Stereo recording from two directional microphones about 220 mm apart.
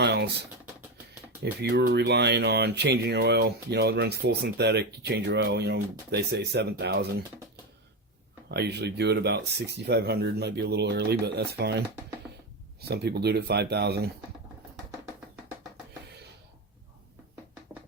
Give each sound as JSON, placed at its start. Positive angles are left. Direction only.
{"t": 0.0, "sound": "a sound", "side_deg": -50}
{"t": 1.4, "sound": "speech", "side_deg": -50}
{"t": 8.4, "sound": "speech", "side_deg": -50}
{"t": 12.8, "sound": "speech", "side_deg": -50}